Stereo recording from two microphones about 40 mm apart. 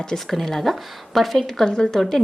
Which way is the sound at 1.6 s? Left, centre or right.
Centre.